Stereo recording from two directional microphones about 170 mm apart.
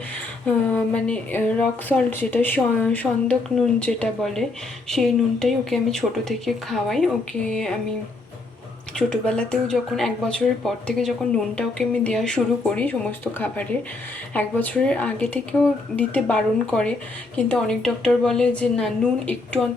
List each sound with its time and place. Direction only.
0.4 s a woman's voice: 10° left (ahead or behind)
9.0 s a woman's voice: 5° left (ahead or behind)